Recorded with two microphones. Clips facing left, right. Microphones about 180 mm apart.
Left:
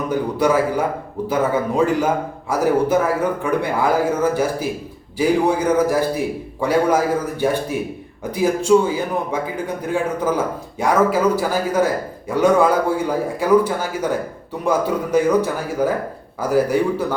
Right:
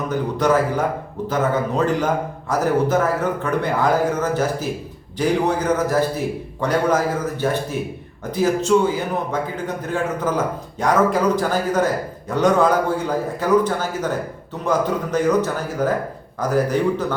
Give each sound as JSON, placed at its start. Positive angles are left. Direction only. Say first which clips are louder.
{"t": 0.1, "sound": "a man's voice", "louder": "left 1 dB", "side_deg": 10}